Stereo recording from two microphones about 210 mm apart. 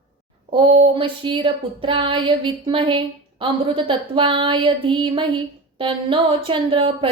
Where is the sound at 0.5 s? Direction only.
25° right (ahead or behind).